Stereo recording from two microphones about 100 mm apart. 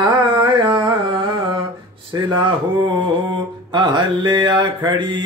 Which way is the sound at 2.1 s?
40° right (ahead or behind).